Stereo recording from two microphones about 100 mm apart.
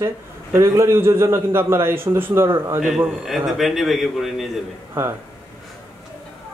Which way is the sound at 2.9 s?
5° right (ahead or behind).